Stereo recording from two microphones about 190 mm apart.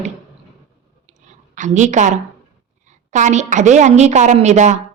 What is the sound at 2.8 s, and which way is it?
A woman's voice, 40° right (ahead or behind).